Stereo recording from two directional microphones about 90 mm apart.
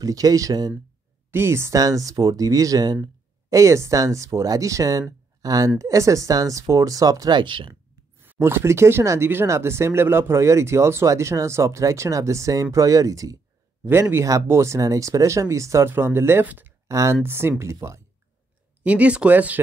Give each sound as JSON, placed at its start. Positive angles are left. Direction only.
{"t": 0.0, "sound": "speech", "side_deg": -40}
{"t": 1.3, "sound": "a woman's voice", "side_deg": -30}
{"t": 8.2, "sound": "speech", "side_deg": -25}
{"t": 16.8, "sound": "speech", "side_deg": -35}
{"t": 18.8, "sound": "speech", "side_deg": -15}